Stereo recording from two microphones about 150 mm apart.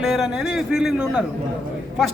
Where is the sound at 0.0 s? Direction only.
Centre (ahead or behind).